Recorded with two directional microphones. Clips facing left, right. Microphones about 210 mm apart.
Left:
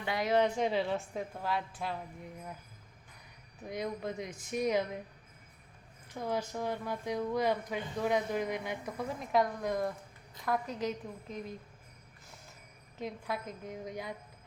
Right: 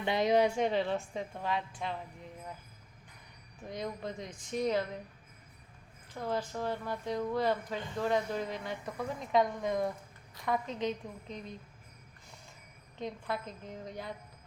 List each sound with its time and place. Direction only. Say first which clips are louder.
0.0 s speech: right 2 dB; 20° right (ahead or behind)
0.6 s a woman's voice: right 1 dB; 5° left (ahead or behind)
3.7 s speech: left 2 dB; 10° left (ahead or behind)
6.1 s a woman's voice: even; 15° left (ahead or behind)
13.0 s speech: right 1 dB; 10° left (ahead or behind)